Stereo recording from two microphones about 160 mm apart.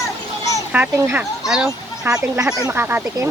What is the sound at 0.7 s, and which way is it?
Speech, 10° right (ahead or behind).